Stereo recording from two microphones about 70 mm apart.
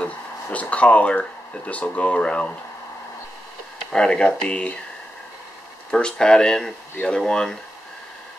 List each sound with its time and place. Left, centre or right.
0.0 s a sound: centre
1.7 s speech: centre
3.9 s speech: centre
5.9 s speech: centre